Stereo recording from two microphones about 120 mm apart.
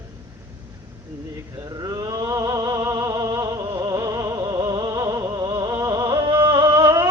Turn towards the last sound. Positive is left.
turn(degrees=-30)  # may be behind; listen again after turning